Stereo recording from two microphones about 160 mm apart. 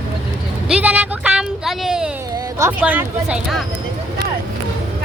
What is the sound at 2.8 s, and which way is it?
Speech, 10° right (ahead or behind).